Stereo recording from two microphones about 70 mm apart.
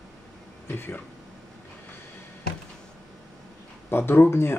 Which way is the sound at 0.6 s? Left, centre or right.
Left.